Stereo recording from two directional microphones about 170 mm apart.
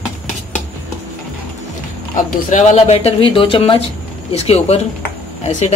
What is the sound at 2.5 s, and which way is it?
Speech, 45° left (ahead or behind).